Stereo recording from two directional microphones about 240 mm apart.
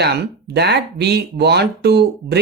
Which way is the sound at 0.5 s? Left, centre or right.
Right.